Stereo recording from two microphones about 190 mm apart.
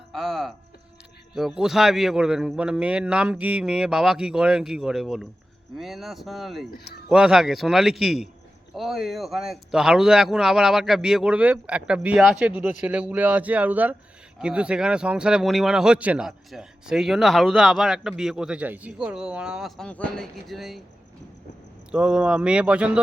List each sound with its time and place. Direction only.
0.1 s music: centre (ahead or behind)
1.4 s speech: centre (ahead or behind)
21.9 s speech: 5° right (ahead or behind)